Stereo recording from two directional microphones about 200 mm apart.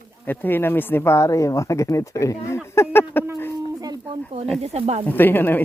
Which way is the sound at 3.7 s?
20° right (ahead or behind).